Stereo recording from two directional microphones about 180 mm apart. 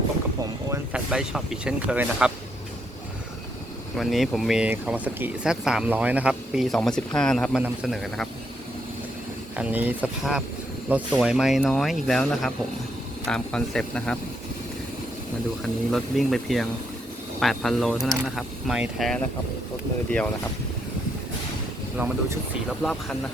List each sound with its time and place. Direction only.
0.7 s speech: 5° right (ahead or behind)
3.9 s speech: centre (ahead or behind)
9.6 s speech: 10° right (ahead or behind)
15.9 s speech: centre (ahead or behind)
21.9 s speech: 10° right (ahead or behind)
22.8 s speech: centre (ahead or behind)